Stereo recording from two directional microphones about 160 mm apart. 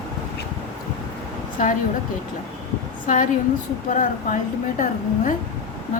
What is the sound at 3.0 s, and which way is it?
A woman's voice, 55° left (ahead or behind).